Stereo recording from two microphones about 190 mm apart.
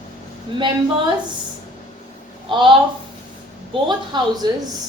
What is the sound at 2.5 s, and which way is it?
Speech, 25° right (ahead or behind).